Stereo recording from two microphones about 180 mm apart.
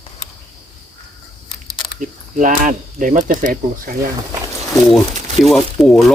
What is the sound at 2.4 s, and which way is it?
Speech, 45° right (ahead or behind).